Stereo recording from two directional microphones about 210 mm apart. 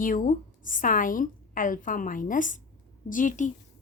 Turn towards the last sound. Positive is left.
turn(degrees=40)  # may be behind; listen again after turning